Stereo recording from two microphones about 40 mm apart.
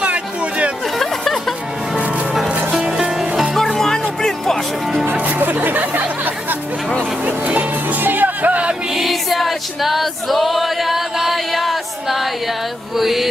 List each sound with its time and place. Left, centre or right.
0.0 s a sound: right
0.9 s a sound: centre
2.9 s music: centre
3.8 s music: centre
5.1 s music: right
5.4 s music: right
8.9 s music: centre
13.0 s mantra: centre